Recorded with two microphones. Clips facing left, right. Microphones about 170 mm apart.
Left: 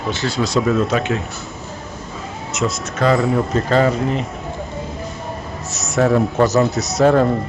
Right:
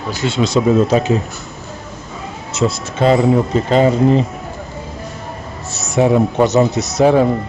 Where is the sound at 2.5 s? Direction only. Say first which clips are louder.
Right 4 dB; 30° right (ahead or behind).